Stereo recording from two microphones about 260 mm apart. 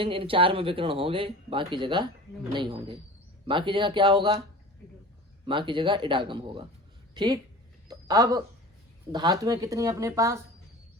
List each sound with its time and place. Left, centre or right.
0.0 s speech: right
5.5 s a woman's voice: centre
7.9 s a sound: centre
9.1 s speech: centre